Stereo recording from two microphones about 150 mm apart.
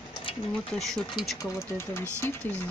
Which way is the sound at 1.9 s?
15° left (ahead or behind).